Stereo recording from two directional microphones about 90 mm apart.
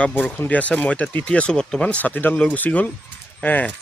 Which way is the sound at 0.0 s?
20° left (ahead or behind).